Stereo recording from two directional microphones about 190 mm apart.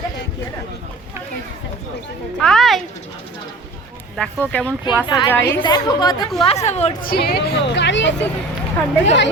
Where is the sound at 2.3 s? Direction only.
Centre (ahead or behind).